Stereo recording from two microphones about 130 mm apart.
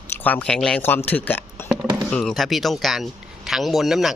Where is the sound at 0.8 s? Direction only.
15° left (ahead or behind).